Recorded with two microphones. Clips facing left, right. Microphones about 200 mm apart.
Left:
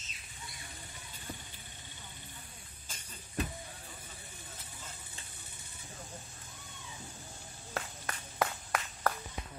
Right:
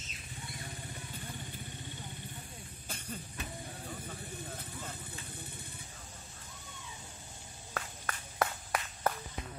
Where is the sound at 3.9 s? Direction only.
55° right (ahead or behind).